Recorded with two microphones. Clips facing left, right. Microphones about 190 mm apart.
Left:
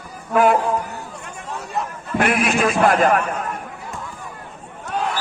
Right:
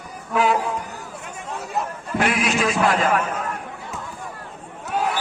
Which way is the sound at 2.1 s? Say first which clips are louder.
Left 3 dB; 55° left (ahead or behind).